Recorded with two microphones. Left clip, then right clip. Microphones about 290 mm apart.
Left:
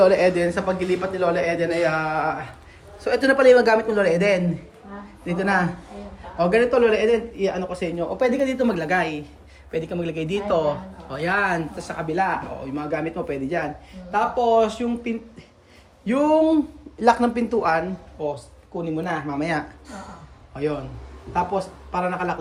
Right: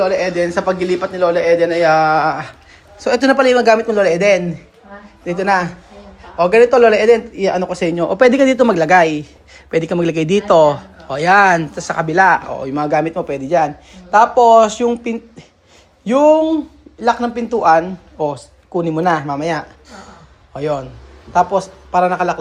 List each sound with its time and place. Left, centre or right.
0.0 s speech: centre
14.7 s speech: centre
18.8 s a man's voice: right